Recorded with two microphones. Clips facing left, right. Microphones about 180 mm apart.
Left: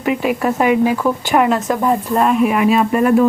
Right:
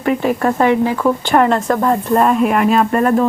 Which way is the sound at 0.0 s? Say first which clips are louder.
Right 1 dB; 10° left (ahead or behind).